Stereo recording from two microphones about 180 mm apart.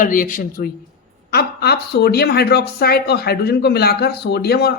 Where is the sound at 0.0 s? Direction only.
50° left (ahead or behind).